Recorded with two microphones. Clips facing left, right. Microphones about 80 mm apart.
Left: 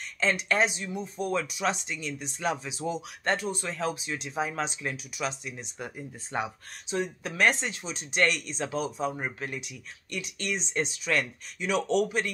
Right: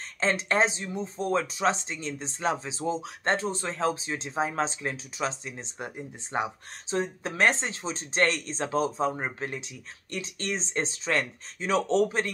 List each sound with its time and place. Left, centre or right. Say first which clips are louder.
0.2 s speech: right 1 dB; right